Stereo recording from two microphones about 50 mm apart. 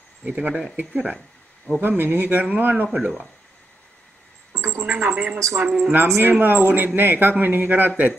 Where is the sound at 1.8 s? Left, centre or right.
Right.